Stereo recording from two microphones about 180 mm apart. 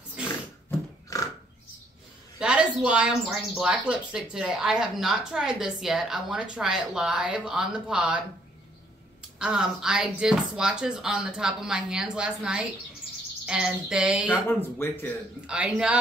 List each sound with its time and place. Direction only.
0.2 s a sound: 15° left (ahead or behind)
2.3 s speech: 5° right (ahead or behind)
9.4 s speech: 5° right (ahead or behind)
14.3 s speech: 10° left (ahead or behind)
15.4 s speech: 5° right (ahead or behind)